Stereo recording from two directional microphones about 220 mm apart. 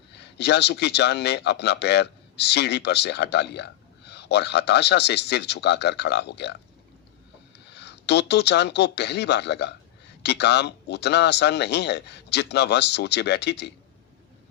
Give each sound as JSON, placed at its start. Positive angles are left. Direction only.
{"t": 0.1, "sound": "speech", "side_deg": 50}
{"t": 7.7, "sound": "speech", "side_deg": 50}